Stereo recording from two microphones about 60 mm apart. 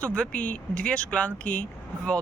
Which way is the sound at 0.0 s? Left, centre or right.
Left.